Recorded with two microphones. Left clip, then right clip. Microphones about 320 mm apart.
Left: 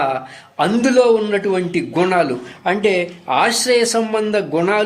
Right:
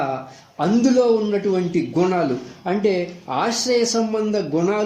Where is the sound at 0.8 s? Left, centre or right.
Left.